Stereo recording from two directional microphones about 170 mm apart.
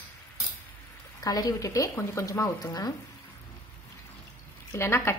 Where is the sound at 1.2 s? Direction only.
20° left (ahead or behind).